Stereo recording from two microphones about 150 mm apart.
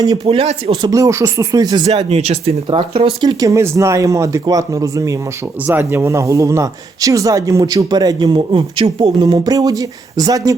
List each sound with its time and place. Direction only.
0.3 s speech: 40° right (ahead or behind)
0.9 s speech: 20° right (ahead or behind)
1.9 s speech: 45° right (ahead or behind)
3.2 s speech: 25° right (ahead or behind)